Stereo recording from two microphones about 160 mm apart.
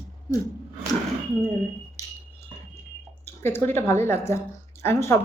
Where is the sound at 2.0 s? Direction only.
20° left (ahead or behind).